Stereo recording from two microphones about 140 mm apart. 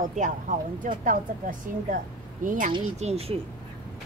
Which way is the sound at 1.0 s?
75° right (ahead or behind).